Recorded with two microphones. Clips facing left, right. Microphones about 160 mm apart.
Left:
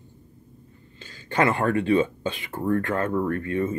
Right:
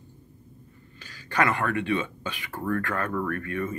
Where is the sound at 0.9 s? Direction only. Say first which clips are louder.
Left 3 dB; 25° left (ahead or behind).